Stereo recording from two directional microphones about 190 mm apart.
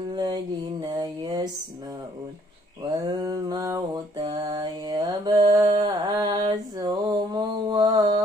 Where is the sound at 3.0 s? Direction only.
25° right (ahead or behind).